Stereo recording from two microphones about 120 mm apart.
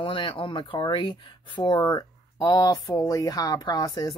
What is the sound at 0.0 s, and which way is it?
Speech, 45° left (ahead or behind).